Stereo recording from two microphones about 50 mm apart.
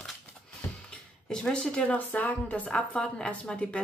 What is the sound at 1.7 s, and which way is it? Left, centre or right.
Speech, left.